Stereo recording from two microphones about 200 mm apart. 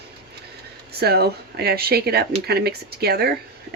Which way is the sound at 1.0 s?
55° right (ahead or behind).